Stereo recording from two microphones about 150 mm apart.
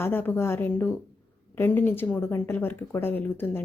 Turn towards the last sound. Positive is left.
turn(degrees=15)  # may be behind; listen again after turning